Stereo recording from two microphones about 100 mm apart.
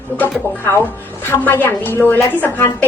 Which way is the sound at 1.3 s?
20° left (ahead or behind).